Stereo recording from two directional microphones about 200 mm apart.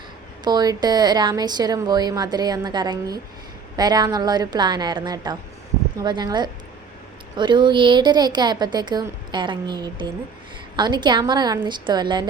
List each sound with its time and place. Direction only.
0.4 s speech: 20° right (ahead or behind)